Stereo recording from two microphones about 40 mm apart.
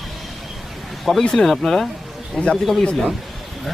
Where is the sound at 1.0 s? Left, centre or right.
Centre.